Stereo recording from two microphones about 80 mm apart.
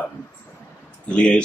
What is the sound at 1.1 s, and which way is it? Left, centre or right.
Speech, centre.